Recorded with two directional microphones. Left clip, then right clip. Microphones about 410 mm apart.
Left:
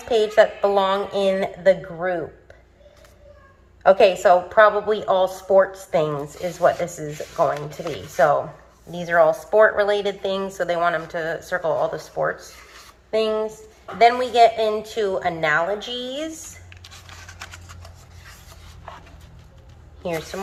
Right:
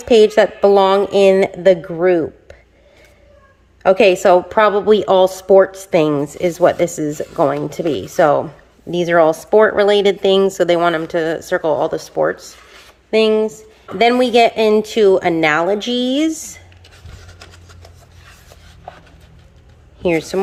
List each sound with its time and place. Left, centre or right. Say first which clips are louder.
0.0 s a woman's voice: right 6 dB; right
3.8 s a woman's voice: right 3 dB; right